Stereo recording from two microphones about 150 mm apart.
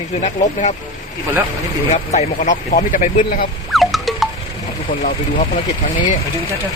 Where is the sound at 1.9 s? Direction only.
50° left (ahead or behind).